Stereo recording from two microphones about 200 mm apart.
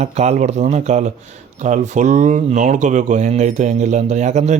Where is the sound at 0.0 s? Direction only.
35° right (ahead or behind).